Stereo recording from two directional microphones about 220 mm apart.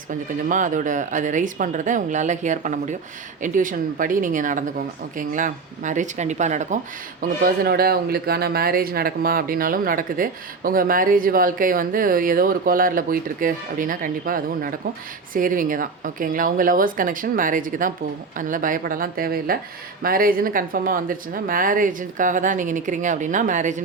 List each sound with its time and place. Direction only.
0.1 s speech: 35° right (ahead or behind)